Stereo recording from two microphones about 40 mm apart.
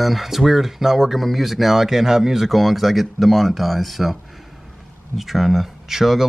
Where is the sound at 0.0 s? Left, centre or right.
Centre.